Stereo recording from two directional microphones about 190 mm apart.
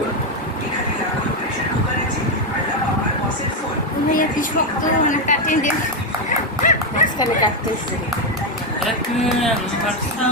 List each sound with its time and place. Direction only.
4.1 s speech: 45° left (ahead or behind)
6.6 s dog: 45° left (ahead or behind)